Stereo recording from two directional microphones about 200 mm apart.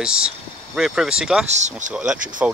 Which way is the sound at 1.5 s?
35° right (ahead or behind).